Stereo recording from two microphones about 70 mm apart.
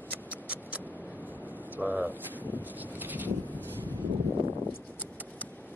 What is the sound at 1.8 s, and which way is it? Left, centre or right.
Speech, right.